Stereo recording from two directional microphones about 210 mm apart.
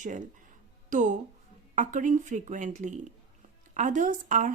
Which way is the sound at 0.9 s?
35° right (ahead or behind).